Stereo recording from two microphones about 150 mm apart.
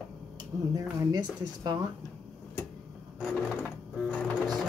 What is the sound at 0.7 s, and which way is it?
Speech, 25° right (ahead or behind).